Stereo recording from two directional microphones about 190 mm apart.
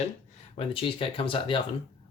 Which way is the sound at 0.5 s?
30° left (ahead or behind).